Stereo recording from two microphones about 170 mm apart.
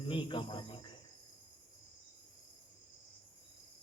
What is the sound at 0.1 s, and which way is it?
Speech, 30° left (ahead or behind).